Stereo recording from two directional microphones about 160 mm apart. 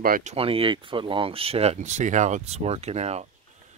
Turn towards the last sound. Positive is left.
turn(degrees=-40)  # may be behind; listen again after turning